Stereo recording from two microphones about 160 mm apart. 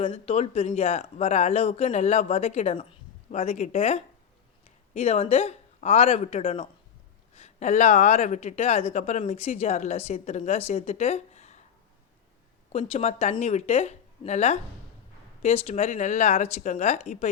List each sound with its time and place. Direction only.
0.0 s speech: 35° left (ahead or behind)
12.7 s speech: 40° left (ahead or behind)